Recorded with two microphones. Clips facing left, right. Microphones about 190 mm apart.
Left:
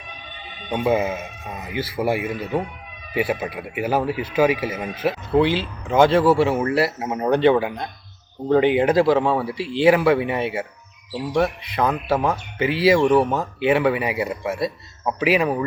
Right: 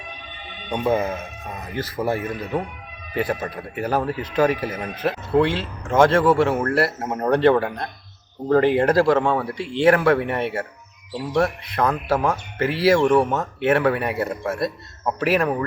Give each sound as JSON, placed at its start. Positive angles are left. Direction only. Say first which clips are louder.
{"t": 0.7, "sound": "speech", "louder": "left 1 dB", "side_deg": 5}